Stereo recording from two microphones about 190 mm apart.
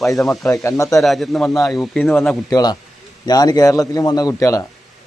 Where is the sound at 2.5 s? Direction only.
20° left (ahead or behind).